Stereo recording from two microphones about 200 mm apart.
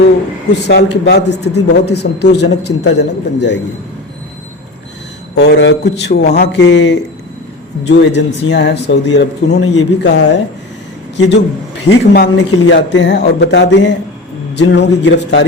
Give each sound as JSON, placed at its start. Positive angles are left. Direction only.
{"t": 0.6, "sound": "a man's voice", "side_deg": 55}
{"t": 5.3, "sound": "a man's voice", "side_deg": 55}